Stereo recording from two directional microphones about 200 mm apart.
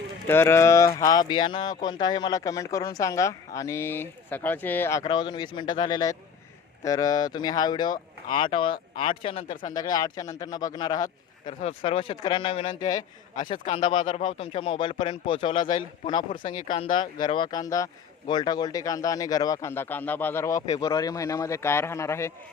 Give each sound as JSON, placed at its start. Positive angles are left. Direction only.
{"t": 0.3, "sound": "speech", "side_deg": 10}